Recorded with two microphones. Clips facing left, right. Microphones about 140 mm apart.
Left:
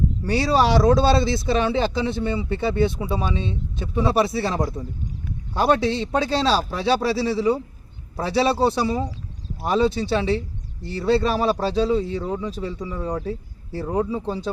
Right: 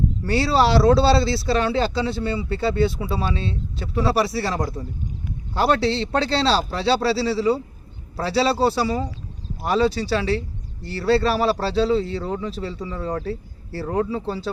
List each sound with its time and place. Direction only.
0.3 s a man's voice: 15° left (ahead or behind)